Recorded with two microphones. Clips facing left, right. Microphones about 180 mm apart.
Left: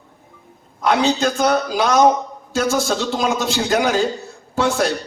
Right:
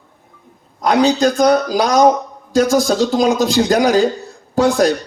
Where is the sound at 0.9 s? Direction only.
35° right (ahead or behind).